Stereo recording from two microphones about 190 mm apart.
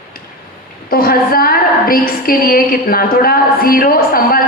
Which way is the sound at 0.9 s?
50° left (ahead or behind).